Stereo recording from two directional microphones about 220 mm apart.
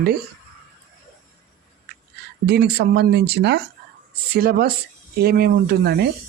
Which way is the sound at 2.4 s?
45° right (ahead or behind).